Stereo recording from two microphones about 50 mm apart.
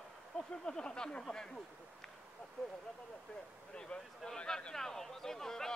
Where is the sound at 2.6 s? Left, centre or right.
Centre.